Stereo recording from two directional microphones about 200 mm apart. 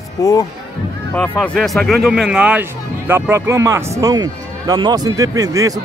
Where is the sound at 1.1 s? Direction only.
5° left (ahead or behind).